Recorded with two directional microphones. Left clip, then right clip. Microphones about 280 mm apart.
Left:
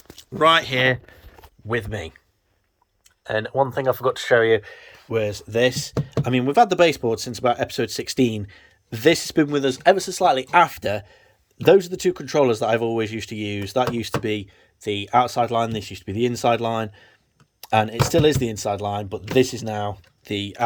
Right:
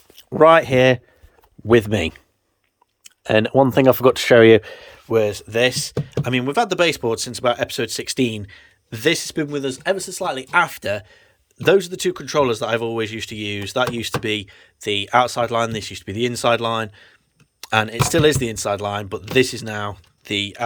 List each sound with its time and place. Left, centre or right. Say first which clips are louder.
0.2 s speech: right 5 dB; centre
3.2 s speech: right 6 dB; right
5.3 s speech: right 2 dB; centre